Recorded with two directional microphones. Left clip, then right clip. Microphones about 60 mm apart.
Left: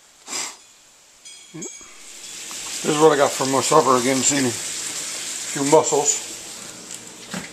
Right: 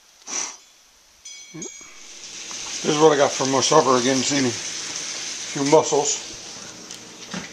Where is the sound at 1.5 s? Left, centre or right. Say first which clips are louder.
Left 2 dB; centre.